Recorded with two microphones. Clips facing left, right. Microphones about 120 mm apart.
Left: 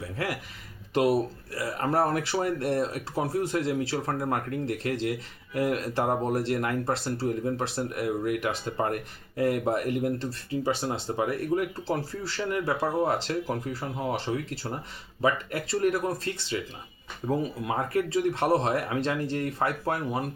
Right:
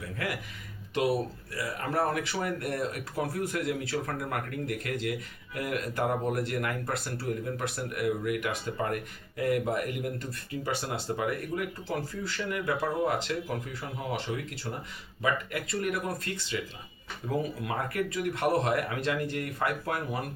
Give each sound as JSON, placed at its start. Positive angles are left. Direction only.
{"t": 1.5, "sound": "speech", "side_deg": 40}